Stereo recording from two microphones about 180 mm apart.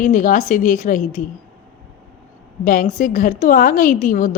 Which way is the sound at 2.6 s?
50° left (ahead or behind).